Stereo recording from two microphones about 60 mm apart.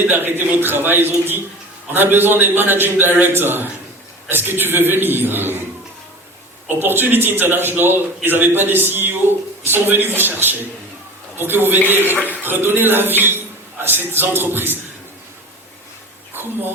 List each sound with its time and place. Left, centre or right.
0.1 s a man's voice: right
6.7 s a man's voice: right
16.3 s speech: right